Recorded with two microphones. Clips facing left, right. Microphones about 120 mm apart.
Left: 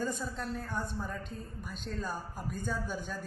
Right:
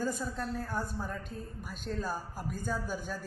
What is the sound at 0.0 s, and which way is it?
A man's voice, 5° right (ahead or behind).